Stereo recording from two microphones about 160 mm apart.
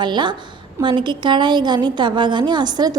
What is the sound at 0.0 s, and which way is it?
A woman's voice, 30° right (ahead or behind).